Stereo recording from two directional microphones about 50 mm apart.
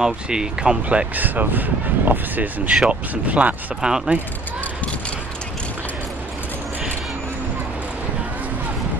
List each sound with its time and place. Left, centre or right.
0.0 s speech: centre
0.8 s speech: right
3.8 s speech: centre